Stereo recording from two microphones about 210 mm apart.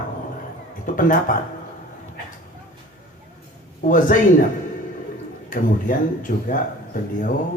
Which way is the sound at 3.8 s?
40° left (ahead or behind).